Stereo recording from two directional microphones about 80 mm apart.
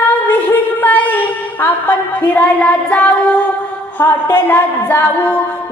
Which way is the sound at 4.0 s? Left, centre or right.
Left.